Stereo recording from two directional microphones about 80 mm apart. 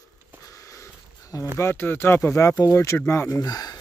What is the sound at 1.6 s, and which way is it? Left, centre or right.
Speech, left.